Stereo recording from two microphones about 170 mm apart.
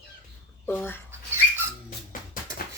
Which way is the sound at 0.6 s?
10° left (ahead or behind).